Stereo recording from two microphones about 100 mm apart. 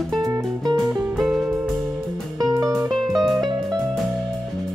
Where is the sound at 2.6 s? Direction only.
35° right (ahead or behind).